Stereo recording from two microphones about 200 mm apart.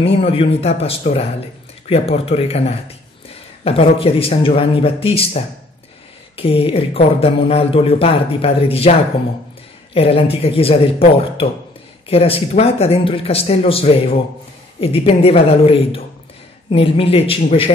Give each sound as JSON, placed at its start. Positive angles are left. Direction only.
{"t": 0.0, "sound": "speech", "side_deg": 30}
{"t": 9.9, "sound": "speech", "side_deg": 30}